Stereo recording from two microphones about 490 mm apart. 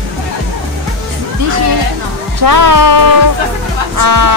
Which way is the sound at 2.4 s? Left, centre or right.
Right.